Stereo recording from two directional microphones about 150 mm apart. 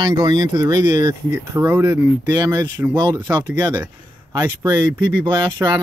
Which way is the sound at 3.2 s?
10° right (ahead or behind).